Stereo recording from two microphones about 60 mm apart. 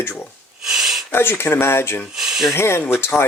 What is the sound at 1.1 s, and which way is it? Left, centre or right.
Speech, left.